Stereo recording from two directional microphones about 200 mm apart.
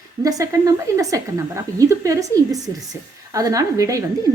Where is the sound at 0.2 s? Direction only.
15° right (ahead or behind).